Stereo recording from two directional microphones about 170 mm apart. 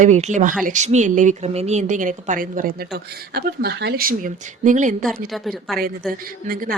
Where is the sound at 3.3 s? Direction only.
70° right (ahead or behind); by 5.0 s 50° right (ahead or behind).